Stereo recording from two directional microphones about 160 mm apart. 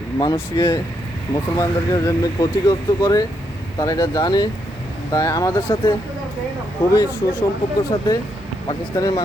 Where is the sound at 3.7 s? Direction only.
25° left (ahead or behind).